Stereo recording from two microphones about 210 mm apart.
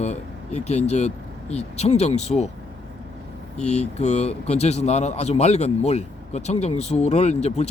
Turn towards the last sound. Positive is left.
turn(degrees=30)  # may be behind; listen again after turning